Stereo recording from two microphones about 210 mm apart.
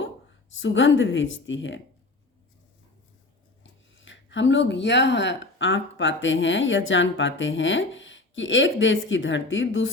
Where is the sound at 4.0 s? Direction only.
60° left (ahead or behind).